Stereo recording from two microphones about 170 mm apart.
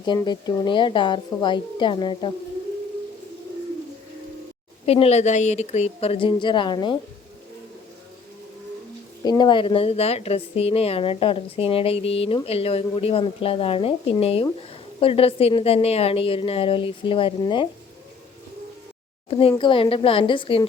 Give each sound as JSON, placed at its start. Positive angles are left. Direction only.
{"t": 0.0, "sound": "speech", "side_deg": 25}
{"t": 4.9, "sound": "a woman's voice", "side_deg": 35}
{"t": 9.2, "sound": "a woman's voice", "side_deg": 25}
{"t": 19.3, "sound": "a woman's voice", "side_deg": 35}